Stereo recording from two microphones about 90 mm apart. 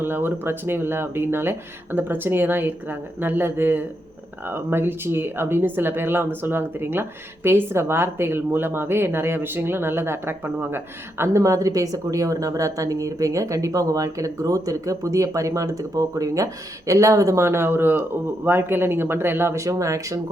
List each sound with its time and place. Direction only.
0.0 s speech: 25° right (ahead or behind)
19.6 s speech: 35° right (ahead or behind)